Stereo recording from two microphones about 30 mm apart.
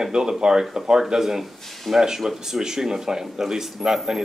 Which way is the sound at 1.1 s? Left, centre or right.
Centre.